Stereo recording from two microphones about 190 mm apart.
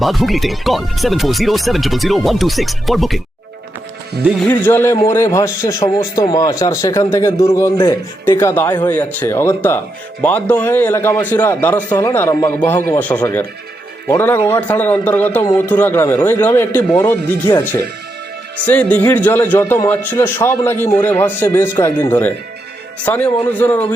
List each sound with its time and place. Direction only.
0.0 s speech: centre (ahead or behind)
4.2 s speech: 5° right (ahead or behind)
4.4 s a man's voice: 10° left (ahead or behind)